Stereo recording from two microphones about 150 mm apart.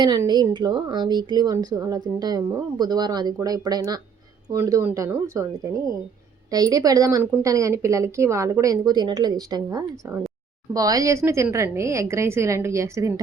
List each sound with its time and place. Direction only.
0.0 s speech: 30° right (ahead or behind)